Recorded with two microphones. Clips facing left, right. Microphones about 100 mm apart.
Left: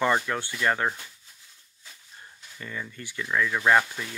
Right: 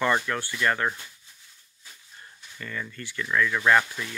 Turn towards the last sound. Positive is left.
turn(degrees=20)  # may be behind; listen again after turning